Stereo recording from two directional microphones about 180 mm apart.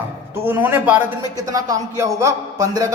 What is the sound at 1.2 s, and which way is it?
A man's voice, 20° right (ahead or behind).